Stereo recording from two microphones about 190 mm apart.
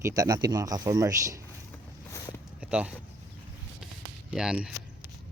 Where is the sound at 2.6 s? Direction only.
5° right (ahead or behind).